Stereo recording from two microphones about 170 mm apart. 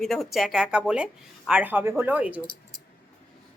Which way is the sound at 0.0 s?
Centre (ahead or behind).